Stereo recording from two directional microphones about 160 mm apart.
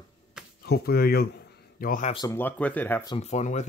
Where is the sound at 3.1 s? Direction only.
40° left (ahead or behind).